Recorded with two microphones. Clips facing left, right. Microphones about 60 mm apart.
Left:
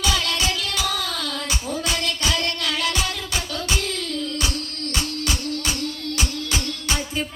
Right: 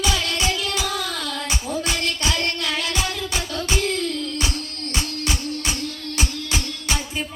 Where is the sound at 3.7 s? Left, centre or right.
Right.